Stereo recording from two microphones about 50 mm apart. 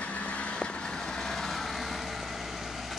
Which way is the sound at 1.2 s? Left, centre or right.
Centre.